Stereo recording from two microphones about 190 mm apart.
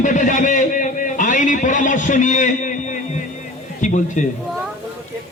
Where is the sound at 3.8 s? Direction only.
40° left (ahead or behind).